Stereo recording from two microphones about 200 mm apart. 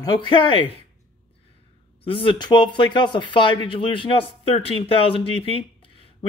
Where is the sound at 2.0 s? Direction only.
25° left (ahead or behind).